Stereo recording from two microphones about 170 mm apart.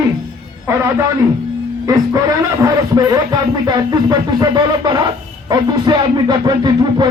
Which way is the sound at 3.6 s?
25° right (ahead or behind).